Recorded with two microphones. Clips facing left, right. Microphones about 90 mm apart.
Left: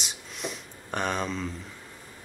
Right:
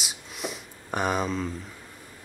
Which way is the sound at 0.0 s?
5° right (ahead or behind).